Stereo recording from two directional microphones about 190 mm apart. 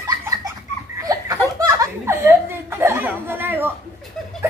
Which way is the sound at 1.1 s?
15° right (ahead or behind).